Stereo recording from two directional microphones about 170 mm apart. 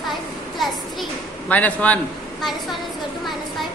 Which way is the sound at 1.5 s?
10° left (ahead or behind).